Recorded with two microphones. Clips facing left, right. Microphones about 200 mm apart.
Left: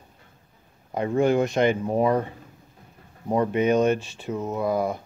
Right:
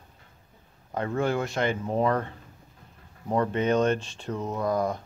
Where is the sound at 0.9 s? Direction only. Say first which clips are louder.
Left 6 dB; 15° left (ahead or behind).